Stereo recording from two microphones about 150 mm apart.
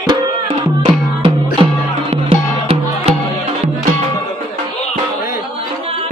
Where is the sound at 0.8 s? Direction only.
35° right (ahead or behind).